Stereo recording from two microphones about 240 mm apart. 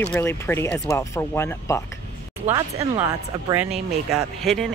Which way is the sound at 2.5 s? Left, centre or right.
Centre.